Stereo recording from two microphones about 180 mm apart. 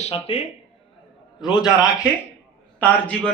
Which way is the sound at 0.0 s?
30° left (ahead or behind).